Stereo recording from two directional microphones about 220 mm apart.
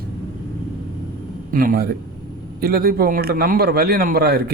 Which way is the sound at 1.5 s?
40° right (ahead or behind).